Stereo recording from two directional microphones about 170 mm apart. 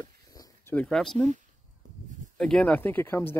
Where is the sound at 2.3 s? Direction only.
5° left (ahead or behind).